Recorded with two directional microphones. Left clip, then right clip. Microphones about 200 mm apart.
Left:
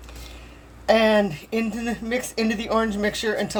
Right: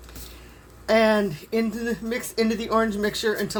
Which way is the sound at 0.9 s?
35° left (ahead or behind).